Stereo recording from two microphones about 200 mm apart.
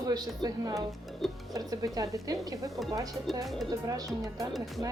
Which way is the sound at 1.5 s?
15° right (ahead or behind).